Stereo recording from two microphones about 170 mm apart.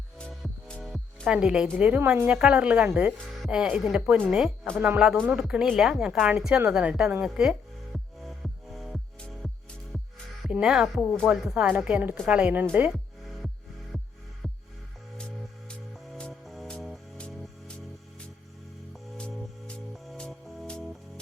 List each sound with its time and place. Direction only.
0.2 s speech: 5° left (ahead or behind)
7.9 s music: centre (ahead or behind)
10.4 s speech: 5° right (ahead or behind)
12.7 s music: 5° right (ahead or behind)
16.1 s music: 5° left (ahead or behind)
18.9 s music: 5° left (ahead or behind)